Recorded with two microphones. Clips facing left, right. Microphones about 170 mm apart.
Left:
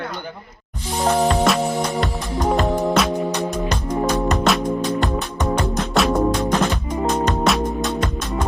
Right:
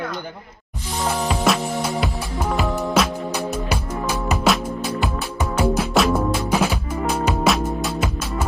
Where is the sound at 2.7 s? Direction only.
20° left (ahead or behind).